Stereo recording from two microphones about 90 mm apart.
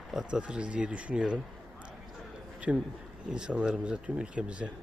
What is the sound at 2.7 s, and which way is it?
Speech, 10° right (ahead or behind).